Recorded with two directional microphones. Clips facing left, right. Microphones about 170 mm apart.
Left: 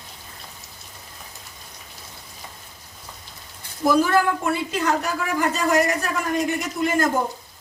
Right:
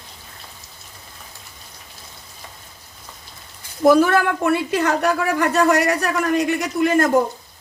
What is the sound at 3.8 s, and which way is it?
A woman's voice, 65° right (ahead or behind).